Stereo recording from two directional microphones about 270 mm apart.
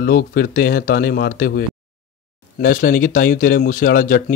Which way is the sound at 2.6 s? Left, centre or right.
Left.